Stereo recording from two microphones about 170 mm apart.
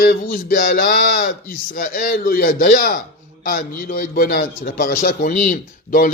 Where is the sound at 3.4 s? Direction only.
55° left (ahead or behind).